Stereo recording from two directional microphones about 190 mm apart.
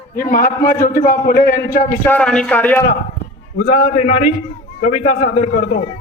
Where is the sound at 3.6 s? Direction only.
35° left (ahead or behind).